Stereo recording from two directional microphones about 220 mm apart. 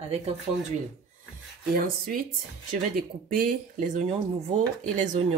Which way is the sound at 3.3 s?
40° right (ahead or behind).